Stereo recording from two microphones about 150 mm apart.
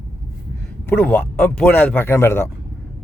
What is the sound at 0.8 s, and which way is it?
Speech, 10° left (ahead or behind).